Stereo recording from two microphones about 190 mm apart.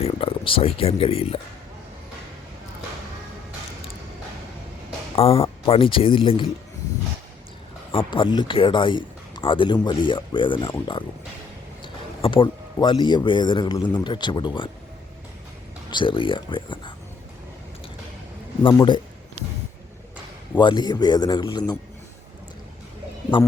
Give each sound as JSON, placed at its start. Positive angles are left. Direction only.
{"t": 0.0, "sound": "speech", "side_deg": 30}
{"t": 5.1, "sound": "speech", "side_deg": 30}
{"t": 7.9, "sound": "speech", "side_deg": 25}
{"t": 15.9, "sound": "speech", "side_deg": 25}
{"t": 18.7, "sound": "speech", "side_deg": 20}
{"t": 20.6, "sound": "speech", "side_deg": 25}
{"t": 23.3, "sound": "speech", "side_deg": 25}